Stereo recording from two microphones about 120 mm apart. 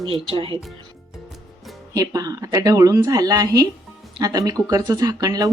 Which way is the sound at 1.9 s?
30° right (ahead or behind).